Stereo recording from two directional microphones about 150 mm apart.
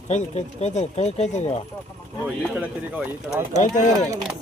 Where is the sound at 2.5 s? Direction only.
10° right (ahead or behind).